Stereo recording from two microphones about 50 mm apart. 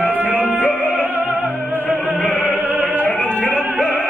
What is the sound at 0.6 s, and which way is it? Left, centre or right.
Music, left.